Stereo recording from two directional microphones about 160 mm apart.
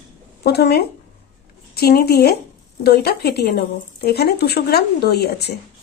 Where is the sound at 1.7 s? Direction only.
75° left (ahead or behind).